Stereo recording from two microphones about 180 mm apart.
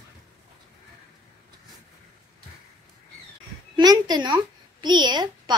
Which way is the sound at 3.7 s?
20° right (ahead or behind).